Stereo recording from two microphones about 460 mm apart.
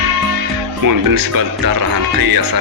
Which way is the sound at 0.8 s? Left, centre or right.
Right.